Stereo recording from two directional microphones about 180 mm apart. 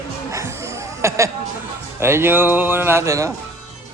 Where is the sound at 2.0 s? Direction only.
15° right (ahead or behind).